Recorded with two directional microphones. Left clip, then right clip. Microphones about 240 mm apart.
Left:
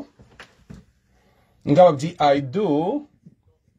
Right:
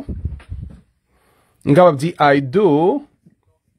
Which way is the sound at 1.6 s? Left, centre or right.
Right.